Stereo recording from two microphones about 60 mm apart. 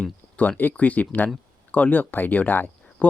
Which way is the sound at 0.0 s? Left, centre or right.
Left.